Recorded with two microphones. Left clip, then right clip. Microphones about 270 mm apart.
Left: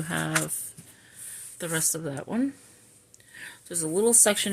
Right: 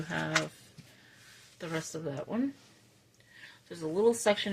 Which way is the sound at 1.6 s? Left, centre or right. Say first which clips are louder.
Left 7 dB; left.